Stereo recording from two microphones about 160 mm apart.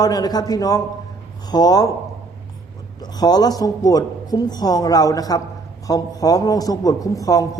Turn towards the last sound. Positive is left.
turn(degrees=20)  # may be behind; listen again after turning